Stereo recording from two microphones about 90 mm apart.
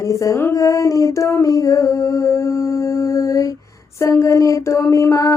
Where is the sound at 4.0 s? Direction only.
35° left (ahead or behind).